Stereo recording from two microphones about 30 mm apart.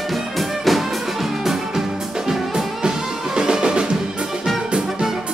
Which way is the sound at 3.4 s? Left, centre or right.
Right.